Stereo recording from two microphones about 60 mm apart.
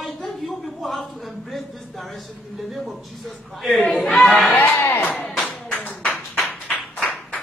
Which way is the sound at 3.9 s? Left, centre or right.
Left.